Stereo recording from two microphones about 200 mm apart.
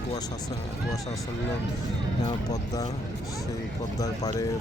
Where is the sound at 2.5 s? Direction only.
15° left (ahead or behind).